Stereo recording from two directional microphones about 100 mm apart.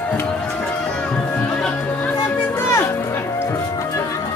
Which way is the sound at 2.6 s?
25° left (ahead or behind).